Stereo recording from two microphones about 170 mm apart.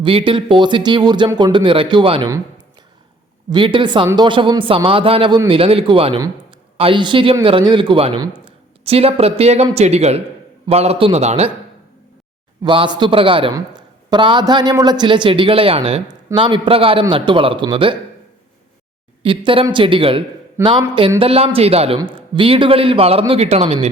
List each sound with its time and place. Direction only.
0.0 s a man's voice: 30° right (ahead or behind)
3.5 s a man's voice: 30° right (ahead or behind)
12.6 s a man's voice: 30° right (ahead or behind)
19.2 s a man's voice: 30° right (ahead or behind)